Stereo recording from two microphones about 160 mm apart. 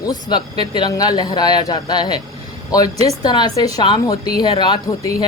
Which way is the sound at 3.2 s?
25° left (ahead or behind).